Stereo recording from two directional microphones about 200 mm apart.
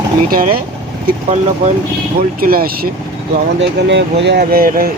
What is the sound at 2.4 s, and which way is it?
Speech, 50° right (ahead or behind).